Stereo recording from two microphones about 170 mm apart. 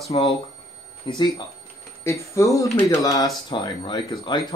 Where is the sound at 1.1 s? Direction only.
25° left (ahead or behind).